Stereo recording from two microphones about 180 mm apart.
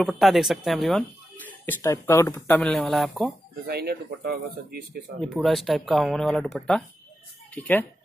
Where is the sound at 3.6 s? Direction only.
60° right (ahead or behind).